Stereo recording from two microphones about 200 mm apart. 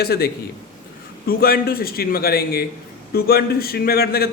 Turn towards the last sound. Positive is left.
turn(degrees=50)  # may be behind; listen again after turning